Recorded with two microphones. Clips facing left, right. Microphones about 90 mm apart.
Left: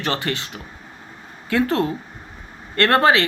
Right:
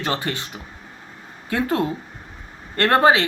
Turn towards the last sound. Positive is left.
turn(degrees=-20)  # may be behind; listen again after turning